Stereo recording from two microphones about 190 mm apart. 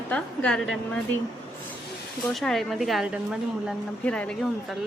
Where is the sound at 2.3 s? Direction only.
Centre (ahead or behind).